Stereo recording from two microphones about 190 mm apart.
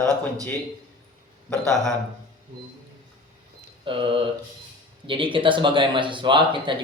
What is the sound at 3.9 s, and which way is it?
Speech, 25° right (ahead or behind).